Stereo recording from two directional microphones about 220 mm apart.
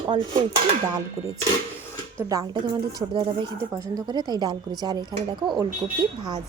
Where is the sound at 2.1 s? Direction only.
15° right (ahead or behind).